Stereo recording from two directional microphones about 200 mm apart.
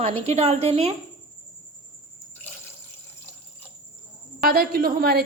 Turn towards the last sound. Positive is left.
turn(degrees=-50)  # may be behind; listen again after turning